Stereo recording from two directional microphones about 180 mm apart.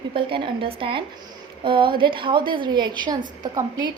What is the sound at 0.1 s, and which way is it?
A woman's voice, 30° right (ahead or behind).